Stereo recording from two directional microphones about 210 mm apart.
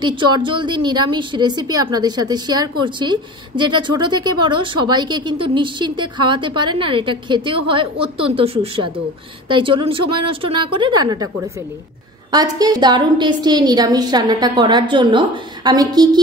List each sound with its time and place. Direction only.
0.0 s a woman's voice: 20° right (ahead or behind)
12.3 s a woman's voice: 20° right (ahead or behind)